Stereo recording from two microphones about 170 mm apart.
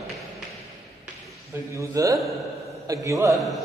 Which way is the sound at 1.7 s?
20° right (ahead or behind).